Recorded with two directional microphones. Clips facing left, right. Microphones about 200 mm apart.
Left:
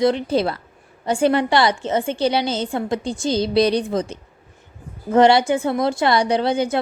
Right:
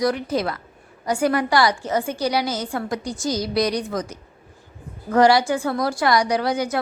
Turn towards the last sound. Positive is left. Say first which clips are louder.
# left 3 dB
turn(degrees=25)  # may be behind; listen again after turning